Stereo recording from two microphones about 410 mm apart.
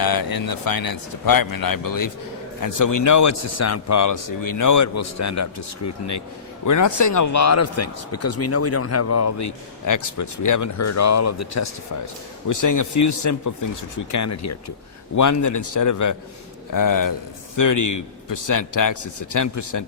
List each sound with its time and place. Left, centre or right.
0.0 s a man's voice: left